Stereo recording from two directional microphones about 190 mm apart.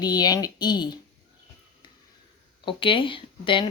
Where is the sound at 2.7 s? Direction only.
25° left (ahead or behind).